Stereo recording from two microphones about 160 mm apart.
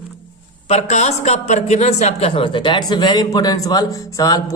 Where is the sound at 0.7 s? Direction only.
45° left (ahead or behind); by 4.4 s 20° left (ahead or behind).